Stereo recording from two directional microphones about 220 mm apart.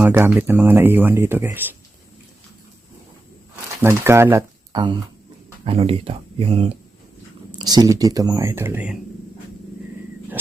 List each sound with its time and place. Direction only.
0.0 s speech: 10° right (ahead or behind)
3.5 s speech: 10° right (ahead or behind)